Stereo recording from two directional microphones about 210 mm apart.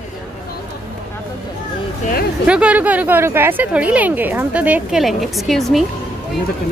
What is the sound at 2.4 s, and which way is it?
A woman's voice, 5° right (ahead or behind).